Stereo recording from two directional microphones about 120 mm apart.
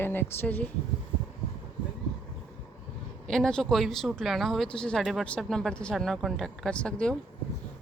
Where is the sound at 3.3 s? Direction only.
5° left (ahead or behind).